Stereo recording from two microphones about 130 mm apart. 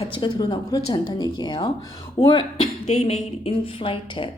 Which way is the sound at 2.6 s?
55° left (ahead or behind).